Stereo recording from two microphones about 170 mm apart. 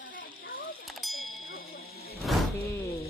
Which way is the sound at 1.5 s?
60° left (ahead or behind).